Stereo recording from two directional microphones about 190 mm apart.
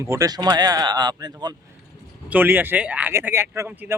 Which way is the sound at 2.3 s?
10° right (ahead or behind).